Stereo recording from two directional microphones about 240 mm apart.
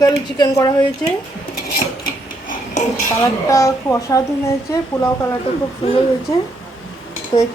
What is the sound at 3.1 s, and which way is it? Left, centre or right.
Speech, centre.